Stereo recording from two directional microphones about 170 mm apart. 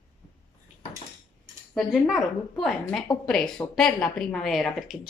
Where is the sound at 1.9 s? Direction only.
Centre (ahead or behind).